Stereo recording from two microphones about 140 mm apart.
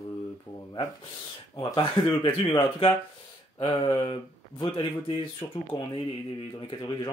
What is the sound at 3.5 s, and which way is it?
Speech, 35° left (ahead or behind).